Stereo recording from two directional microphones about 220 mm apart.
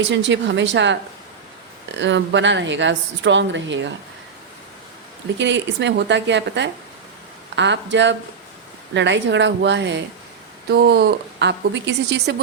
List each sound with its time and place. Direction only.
0.0 s a woman's voice: 55° right (ahead or behind)
5.4 s a woman's voice: 55° right (ahead or behind)